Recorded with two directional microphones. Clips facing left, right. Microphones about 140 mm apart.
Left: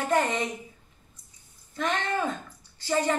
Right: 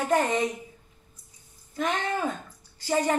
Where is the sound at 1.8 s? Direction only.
10° right (ahead or behind).